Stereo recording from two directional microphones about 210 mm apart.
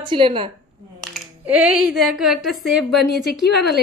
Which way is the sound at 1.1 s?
5° right (ahead or behind).